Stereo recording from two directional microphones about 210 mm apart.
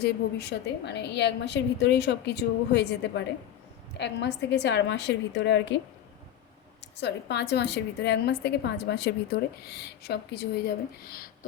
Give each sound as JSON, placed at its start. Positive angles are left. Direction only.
{"t": 0.0, "sound": "a woman's voice", "side_deg": 50}
{"t": 6.9, "sound": "a woman's voice", "side_deg": 55}